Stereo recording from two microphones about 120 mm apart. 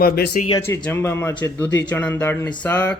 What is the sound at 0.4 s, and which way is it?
Speech, 90° left.